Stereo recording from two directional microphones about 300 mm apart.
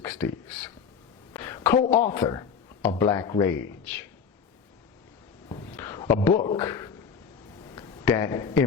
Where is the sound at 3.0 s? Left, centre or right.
Centre.